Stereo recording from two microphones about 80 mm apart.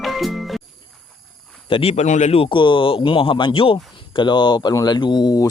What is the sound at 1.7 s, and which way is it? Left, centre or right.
A man's voice, left.